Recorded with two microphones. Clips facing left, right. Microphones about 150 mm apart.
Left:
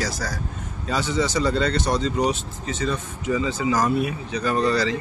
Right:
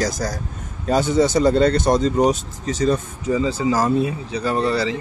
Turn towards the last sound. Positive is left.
turn(degrees=-25)  # may be behind; listen again after turning